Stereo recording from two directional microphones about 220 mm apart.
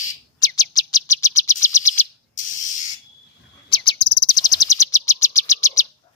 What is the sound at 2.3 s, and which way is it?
Spray, 35° left (ahead or behind).